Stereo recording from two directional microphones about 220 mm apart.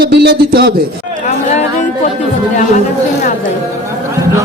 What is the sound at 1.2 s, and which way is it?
Chatter, 30° left (ahead or behind).